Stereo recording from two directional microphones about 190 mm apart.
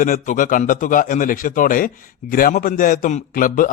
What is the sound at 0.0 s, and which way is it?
A man's voice, 45° left (ahead or behind).